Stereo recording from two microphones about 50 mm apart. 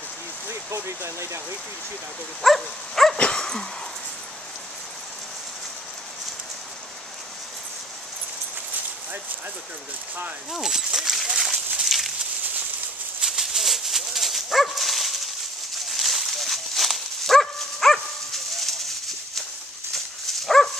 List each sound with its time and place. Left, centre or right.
0.5 s speech: right
2.4 s dog: centre
3.2 s dog: centre
10.5 s speech: centre
11.8 s a sound: centre
13.2 s dog: centre